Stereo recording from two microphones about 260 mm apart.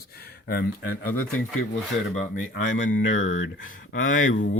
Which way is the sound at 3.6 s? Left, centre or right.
Left.